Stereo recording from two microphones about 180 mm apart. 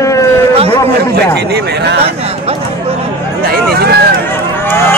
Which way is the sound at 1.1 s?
65° right (ahead or behind).